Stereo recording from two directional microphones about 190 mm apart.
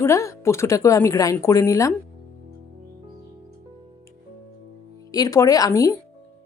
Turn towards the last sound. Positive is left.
turn(degrees=15)  # may be behind; listen again after turning